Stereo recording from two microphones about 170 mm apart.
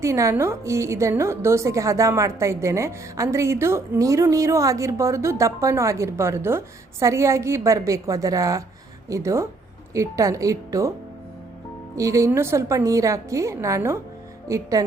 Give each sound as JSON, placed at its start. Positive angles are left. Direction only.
{"t": 0.0, "sound": "a woman's voice", "side_deg": -15}
{"t": 11.9, "sound": "a woman's voice", "side_deg": -20}